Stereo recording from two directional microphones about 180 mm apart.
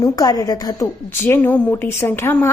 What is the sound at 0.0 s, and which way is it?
Speech, 20° left (ahead or behind).